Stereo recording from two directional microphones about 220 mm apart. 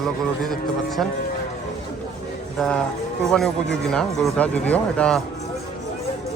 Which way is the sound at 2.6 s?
5° left (ahead or behind).